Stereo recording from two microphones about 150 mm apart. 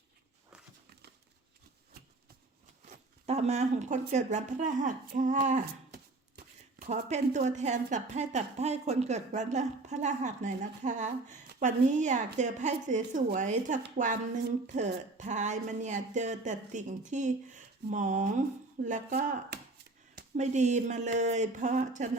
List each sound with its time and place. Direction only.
3.2 s speech: 45° right (ahead or behind)
5.9 s speech: 80° right; by 19.2 s 55° right (ahead or behind)
20.3 s speech: 50° right (ahead or behind)